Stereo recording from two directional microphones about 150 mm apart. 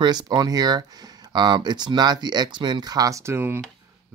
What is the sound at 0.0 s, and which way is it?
Speech, 30° right (ahead or behind).